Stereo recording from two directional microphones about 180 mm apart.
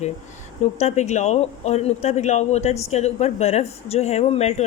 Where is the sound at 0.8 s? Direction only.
40° left (ahead or behind).